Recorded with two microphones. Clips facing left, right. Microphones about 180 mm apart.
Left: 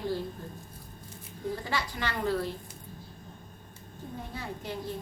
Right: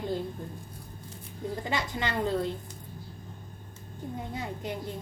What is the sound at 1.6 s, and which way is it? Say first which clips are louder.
Speech: right 2 dB; 20° right (ahead or behind).